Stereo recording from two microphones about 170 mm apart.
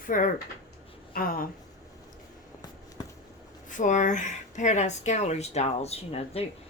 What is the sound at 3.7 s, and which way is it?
A woman's voice, 50° left (ahead or behind).